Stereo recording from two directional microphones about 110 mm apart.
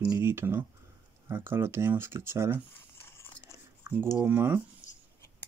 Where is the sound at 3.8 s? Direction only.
25° right (ahead or behind).